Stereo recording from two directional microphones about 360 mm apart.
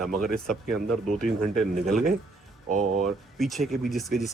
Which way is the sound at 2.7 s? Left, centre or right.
Right.